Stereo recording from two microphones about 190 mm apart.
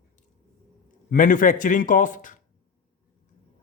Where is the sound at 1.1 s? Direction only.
45° left (ahead or behind).